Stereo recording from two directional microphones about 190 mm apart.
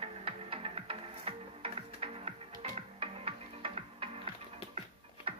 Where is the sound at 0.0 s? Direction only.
30° right (ahead or behind).